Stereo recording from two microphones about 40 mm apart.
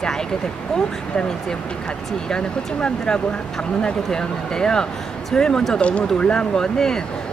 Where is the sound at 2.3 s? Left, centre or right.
Left.